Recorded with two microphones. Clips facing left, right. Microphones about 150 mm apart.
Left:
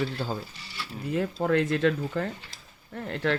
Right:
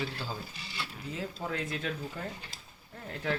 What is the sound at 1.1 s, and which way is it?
Speech, 60° left (ahead or behind).